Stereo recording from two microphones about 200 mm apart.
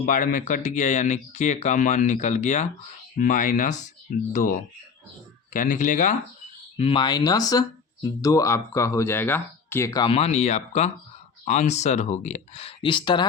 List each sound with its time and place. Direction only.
0.0 s speech: 40° left (ahead or behind)
5.5 s speech: 40° left (ahead or behind)
6.7 s speech: 25° left (ahead or behind)
10.1 s speech: 30° left (ahead or behind)